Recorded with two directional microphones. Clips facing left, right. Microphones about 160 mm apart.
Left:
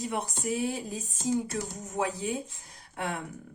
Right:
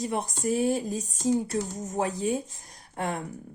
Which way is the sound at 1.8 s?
40° right (ahead or behind).